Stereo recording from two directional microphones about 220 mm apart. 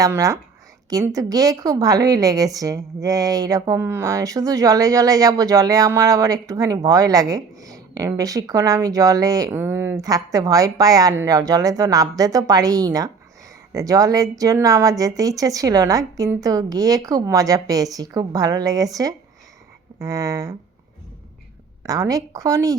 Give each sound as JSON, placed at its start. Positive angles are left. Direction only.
{"t": 0.0, "sound": "a woman's voice", "side_deg": -15}
{"t": 21.8, "sound": "a woman's voice", "side_deg": -15}